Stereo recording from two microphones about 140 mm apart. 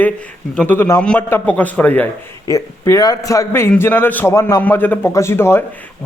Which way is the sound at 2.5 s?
20° left (ahead or behind).